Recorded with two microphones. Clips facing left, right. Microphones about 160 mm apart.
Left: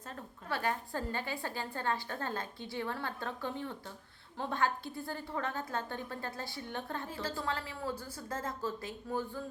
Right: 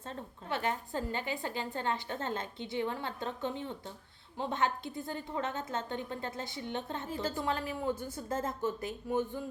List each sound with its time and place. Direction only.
0.0 s a woman's voice: 30° right (ahead or behind)